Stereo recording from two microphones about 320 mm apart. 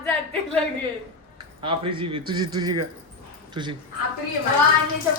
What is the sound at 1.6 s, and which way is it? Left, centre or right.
A man's voice, centre.